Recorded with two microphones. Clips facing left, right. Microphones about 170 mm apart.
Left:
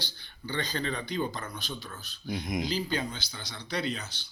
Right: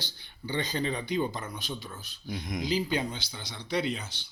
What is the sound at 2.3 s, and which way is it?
Speech, 20° left (ahead or behind).